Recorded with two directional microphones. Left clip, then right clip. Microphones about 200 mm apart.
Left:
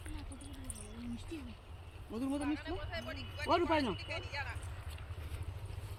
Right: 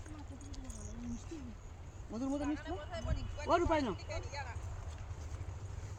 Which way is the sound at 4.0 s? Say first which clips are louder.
Left 3 dB; 55° right (ahead or behind).